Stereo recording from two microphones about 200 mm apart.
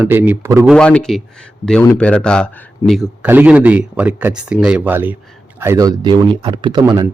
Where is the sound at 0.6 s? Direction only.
5° left (ahead or behind).